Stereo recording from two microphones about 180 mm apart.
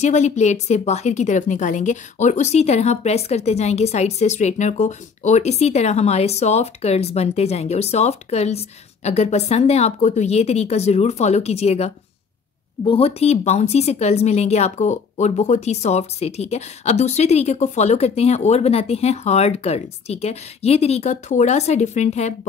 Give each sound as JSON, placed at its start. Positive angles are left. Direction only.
{"t": 0.0, "sound": "a woman's voice", "side_deg": 40}